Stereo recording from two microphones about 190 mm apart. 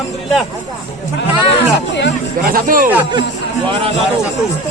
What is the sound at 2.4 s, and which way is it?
Speech, 50° right (ahead or behind).